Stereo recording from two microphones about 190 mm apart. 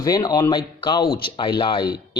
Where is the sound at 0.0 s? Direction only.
20° left (ahead or behind).